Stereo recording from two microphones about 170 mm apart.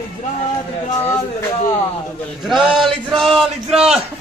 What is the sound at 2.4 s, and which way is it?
A man's voice, centre (ahead or behind).